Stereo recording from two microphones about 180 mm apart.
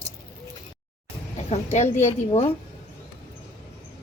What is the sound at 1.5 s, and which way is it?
A woman's voice, 40° left (ahead or behind).